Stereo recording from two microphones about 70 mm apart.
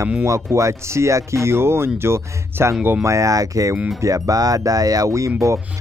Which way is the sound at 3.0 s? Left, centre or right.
Right.